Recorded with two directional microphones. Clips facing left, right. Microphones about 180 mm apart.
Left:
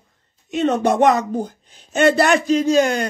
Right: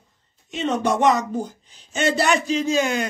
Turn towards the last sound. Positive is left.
turn(degrees=45)  # may be behind; listen again after turning